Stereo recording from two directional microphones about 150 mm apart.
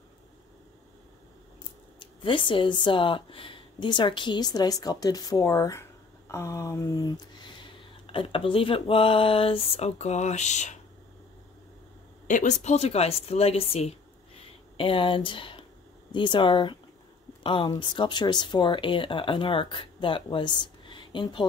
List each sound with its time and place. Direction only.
2.0 s speech: 35° left (ahead or behind)
8.1 s speech: 35° left (ahead or behind)
12.3 s speech: 55° left (ahead or behind); by 21.5 s 35° left (ahead or behind)